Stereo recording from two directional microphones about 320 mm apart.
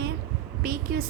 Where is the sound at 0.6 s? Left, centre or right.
Right.